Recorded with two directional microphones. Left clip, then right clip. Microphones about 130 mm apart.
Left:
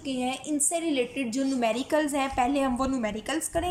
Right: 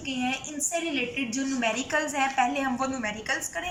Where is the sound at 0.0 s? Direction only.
40° left (ahead or behind).